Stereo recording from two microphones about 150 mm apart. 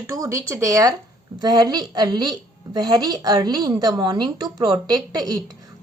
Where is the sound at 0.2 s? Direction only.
20° right (ahead or behind).